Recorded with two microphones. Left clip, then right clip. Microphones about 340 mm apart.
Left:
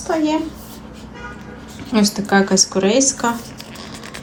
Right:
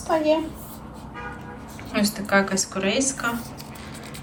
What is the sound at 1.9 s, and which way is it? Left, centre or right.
Speech, centre.